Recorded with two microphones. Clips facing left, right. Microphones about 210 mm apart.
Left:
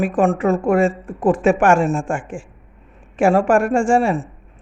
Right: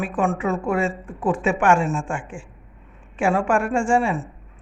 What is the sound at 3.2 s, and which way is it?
Speech, 45° left (ahead or behind).